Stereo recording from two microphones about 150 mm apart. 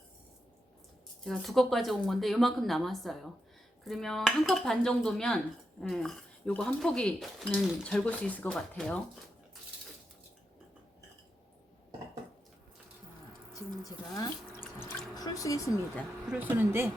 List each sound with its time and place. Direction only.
1.2 s speech: centre (ahead or behind)
13.5 s speech: 25° left (ahead or behind)
16.3 s speech: 10° right (ahead or behind)